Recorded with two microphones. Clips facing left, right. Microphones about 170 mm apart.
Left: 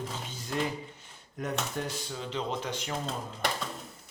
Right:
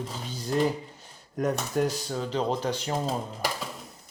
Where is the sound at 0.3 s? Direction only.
35° right (ahead or behind).